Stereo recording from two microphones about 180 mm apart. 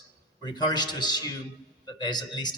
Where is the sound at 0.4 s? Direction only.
25° left (ahead or behind).